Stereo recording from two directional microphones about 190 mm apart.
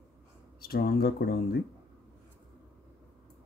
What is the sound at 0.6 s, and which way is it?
Speech, 55° left (ahead or behind).